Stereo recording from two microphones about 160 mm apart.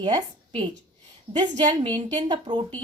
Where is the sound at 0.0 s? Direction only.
25° right (ahead or behind).